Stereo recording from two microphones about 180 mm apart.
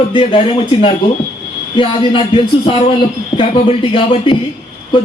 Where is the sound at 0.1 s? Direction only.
30° left (ahead or behind).